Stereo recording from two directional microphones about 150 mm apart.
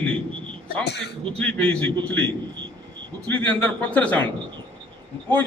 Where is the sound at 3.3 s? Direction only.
10° left (ahead or behind).